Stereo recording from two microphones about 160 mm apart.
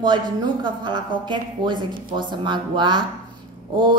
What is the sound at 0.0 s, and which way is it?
A woman's voice, 30° right (ahead or behind).